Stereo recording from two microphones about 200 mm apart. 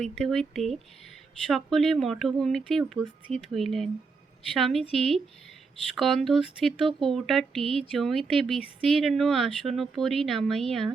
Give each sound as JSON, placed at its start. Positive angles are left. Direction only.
{"t": 0.0, "sound": "speech", "side_deg": 0}